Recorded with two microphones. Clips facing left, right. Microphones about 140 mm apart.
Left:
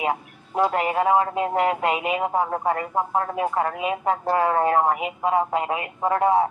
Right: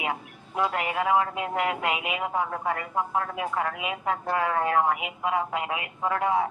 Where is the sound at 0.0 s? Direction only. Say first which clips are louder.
Left 6 dB; 35° left (ahead or behind).